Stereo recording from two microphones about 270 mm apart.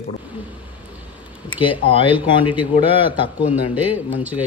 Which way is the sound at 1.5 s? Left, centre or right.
Centre.